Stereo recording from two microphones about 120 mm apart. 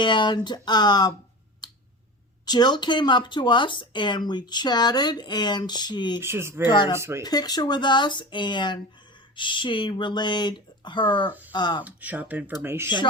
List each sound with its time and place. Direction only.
0.0 s speech: 40° left (ahead or behind)
2.5 s speech: 35° left (ahead or behind)
6.1 s speech: 20° right (ahead or behind)
6.7 s speech: 40° left (ahead or behind)
11.8 s speech: 15° right (ahead or behind)